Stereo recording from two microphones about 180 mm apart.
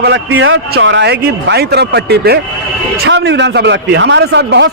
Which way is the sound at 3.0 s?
80° right.